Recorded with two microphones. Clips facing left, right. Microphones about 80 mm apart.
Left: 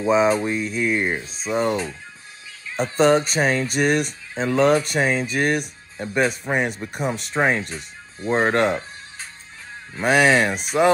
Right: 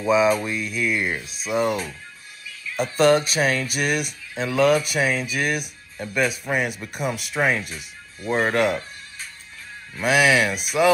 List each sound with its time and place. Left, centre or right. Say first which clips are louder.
0.0 s speech: left 1 dB; left